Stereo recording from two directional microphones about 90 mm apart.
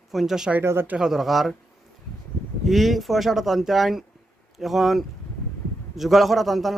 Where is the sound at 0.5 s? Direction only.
25° right (ahead or behind).